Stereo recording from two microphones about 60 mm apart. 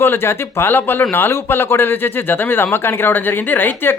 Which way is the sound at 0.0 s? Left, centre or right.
Left.